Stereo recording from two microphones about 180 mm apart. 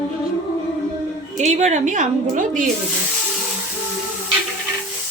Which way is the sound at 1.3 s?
40° right (ahead or behind).